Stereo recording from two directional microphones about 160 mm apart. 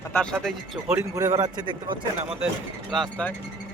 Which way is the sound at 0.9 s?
15° right (ahead or behind).